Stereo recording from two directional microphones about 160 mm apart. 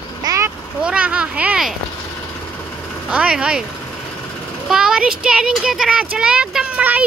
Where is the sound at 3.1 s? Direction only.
5° right (ahead or behind).